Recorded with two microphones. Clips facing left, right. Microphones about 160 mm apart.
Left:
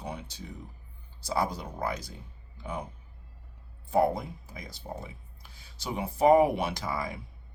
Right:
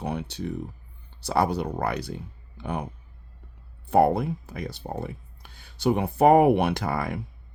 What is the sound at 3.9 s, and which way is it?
Speech, 65° right (ahead or behind).